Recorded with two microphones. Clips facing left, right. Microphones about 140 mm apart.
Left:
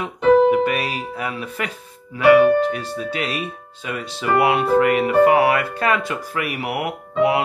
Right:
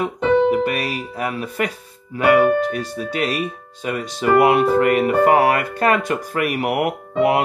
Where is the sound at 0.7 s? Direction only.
40° right (ahead or behind).